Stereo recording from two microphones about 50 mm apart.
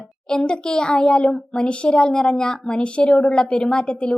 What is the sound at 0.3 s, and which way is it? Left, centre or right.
A child's voice, centre.